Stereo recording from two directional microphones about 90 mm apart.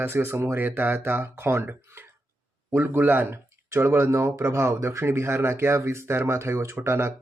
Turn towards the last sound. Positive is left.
turn(degrees=-30)  # may be behind; listen again after turning